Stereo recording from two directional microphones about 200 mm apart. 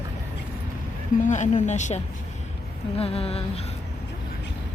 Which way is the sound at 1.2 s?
40° left (ahead or behind).